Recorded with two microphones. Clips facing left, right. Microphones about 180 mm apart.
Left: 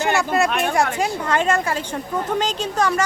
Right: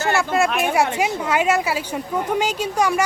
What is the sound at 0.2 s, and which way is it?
A woman's voice, centre (ahead or behind).